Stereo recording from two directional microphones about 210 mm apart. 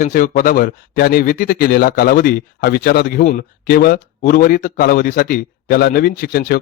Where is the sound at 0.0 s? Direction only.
40° left (ahead or behind).